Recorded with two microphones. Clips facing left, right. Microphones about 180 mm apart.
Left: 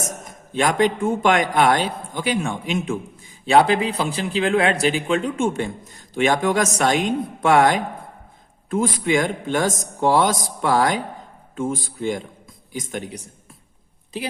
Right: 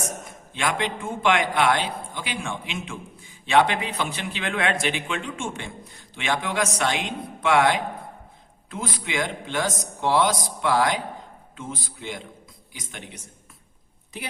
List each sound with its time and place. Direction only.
0.3 s a man's voice: 40° left (ahead or behind)